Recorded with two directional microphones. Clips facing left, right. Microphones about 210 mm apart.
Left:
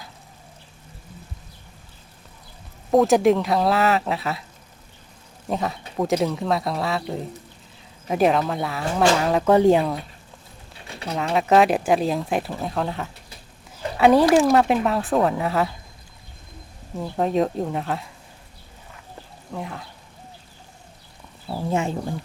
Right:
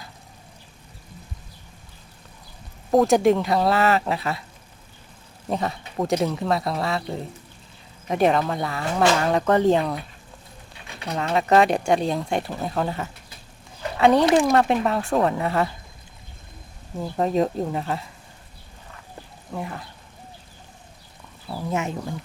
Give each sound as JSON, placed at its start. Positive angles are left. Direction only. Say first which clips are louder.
{"t": 2.9, "sound": "speech", "louder": "left 1 dB", "side_deg": 0}
{"t": 5.5, "sound": "speech", "louder": "even", "side_deg": 0}
{"t": 11.1, "sound": "speech", "louder": "left 1 dB", "side_deg": 0}
{"t": 17.0, "sound": "speech", "louder": "even", "side_deg": 0}
{"t": 19.5, "sound": "speech", "louder": "right 1 dB", "side_deg": 0}
{"t": 21.6, "sound": "speech", "louder": "left 3 dB", "side_deg": 30}